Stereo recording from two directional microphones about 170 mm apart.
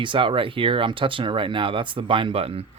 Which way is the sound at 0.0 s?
30° right (ahead or behind).